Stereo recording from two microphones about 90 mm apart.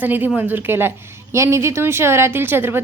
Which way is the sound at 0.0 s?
20° right (ahead or behind).